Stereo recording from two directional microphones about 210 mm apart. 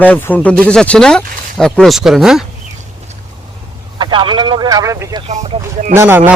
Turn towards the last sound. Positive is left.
turn(degrees=-10)  # may be behind; listen again after turning